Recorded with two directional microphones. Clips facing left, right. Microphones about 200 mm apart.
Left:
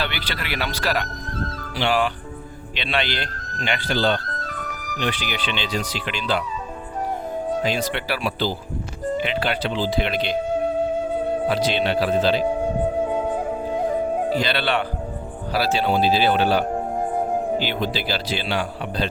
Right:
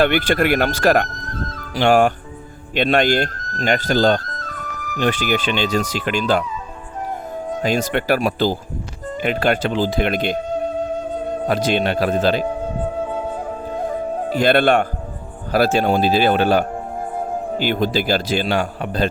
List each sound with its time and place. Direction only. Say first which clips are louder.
0.0 s speech: right 13 dB; 50° right (ahead or behind)
7.6 s speech: right 4 dB; 45° right (ahead or behind)
11.4 s speech: right 5 dB; 50° right (ahead or behind)
13.1 s flute: left 2 dB; 15° left (ahead or behind)
14.3 s speech: right 7 dB; 50° right (ahead or behind)